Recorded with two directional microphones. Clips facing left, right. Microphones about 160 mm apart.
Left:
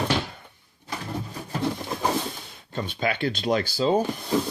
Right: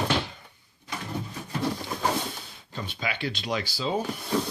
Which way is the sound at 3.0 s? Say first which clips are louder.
Left 6 dB; 50° left (ahead or behind).